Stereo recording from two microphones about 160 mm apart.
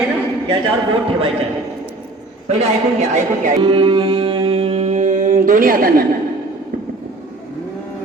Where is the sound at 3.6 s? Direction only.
30° right (ahead or behind); by 6.1 s 65° right (ahead or behind).